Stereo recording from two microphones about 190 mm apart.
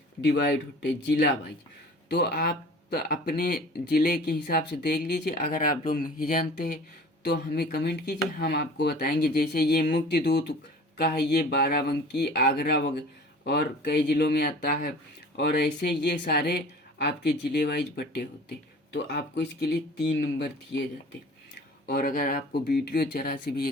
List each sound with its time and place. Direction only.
0.3 s speech: 60° left (ahead or behind)
15.4 s speech: 60° left (ahead or behind)
21.8 s speech: 50° left (ahead or behind)